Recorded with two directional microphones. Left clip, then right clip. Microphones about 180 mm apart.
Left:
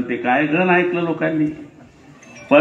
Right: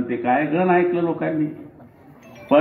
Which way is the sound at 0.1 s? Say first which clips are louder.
Left 3 dB; 20° left (ahead or behind).